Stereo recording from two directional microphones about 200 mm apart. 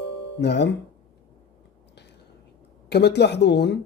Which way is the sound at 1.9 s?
60° left (ahead or behind).